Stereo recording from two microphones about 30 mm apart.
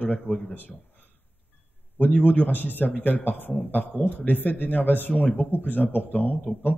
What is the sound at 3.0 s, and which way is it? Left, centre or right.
A man's voice, left.